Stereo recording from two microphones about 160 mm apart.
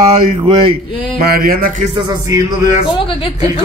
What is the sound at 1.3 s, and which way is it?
Speech, 65° right (ahead or behind).